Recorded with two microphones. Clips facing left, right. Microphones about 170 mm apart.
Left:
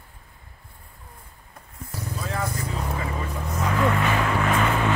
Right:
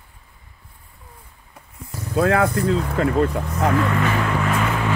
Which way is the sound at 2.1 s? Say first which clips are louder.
Right 13 dB; 70° right (ahead or behind).